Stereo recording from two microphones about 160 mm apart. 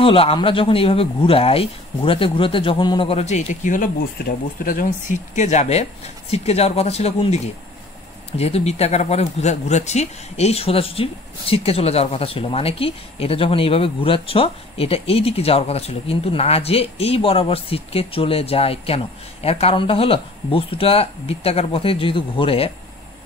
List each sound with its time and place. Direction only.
0.0 s speech: 35° left (ahead or behind)